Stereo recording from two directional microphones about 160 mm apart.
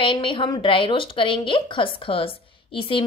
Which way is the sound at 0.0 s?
30° left (ahead or behind).